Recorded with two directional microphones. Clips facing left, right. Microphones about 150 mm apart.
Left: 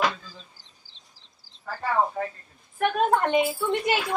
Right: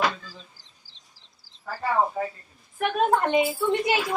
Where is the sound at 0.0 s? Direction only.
Centre (ahead or behind).